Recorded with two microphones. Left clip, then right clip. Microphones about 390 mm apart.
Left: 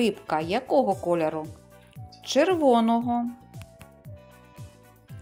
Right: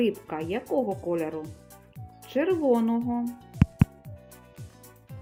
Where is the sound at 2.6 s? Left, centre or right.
Centre.